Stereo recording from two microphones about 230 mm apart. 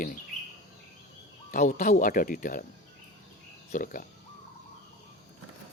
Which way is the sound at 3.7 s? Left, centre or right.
Left.